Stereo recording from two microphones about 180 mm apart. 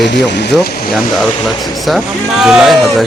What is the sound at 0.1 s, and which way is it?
Speech, 70° left (ahead or behind).